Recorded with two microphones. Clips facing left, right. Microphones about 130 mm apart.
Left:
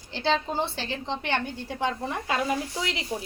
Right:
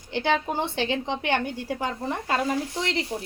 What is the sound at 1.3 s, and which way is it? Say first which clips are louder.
A woman's voice: right 4 dB; 10° right (ahead or behind).